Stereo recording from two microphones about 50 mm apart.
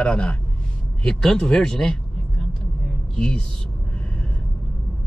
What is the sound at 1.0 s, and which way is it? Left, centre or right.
Vehicle, centre.